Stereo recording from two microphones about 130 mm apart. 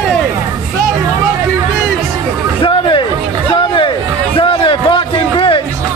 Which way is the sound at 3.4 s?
40° left (ahead or behind).